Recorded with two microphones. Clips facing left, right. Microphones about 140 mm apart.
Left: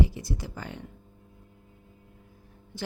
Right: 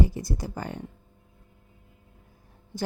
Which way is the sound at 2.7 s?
40° right (ahead or behind).